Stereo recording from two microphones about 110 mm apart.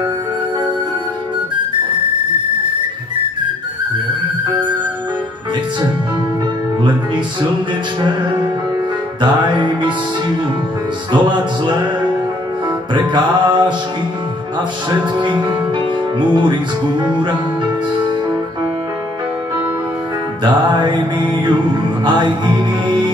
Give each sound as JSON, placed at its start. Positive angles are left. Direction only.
{"t": 9.2, "sound": "music", "side_deg": -45}
{"t": 11.1, "sound": "music", "side_deg": -45}
{"t": 12.9, "sound": "music", "side_deg": -45}
{"t": 16.2, "sound": "music", "side_deg": -45}
{"t": 20.4, "sound": "music", "side_deg": -45}